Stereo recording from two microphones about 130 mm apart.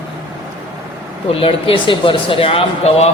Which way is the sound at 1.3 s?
45° left (ahead or behind).